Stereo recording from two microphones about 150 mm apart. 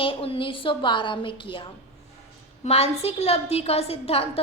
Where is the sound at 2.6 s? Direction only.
40° left (ahead or behind).